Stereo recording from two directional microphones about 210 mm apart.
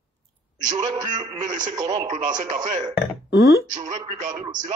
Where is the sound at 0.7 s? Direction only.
20° right (ahead or behind).